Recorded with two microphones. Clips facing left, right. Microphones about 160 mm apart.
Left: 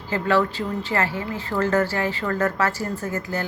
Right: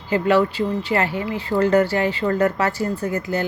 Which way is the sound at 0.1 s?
15° right (ahead or behind).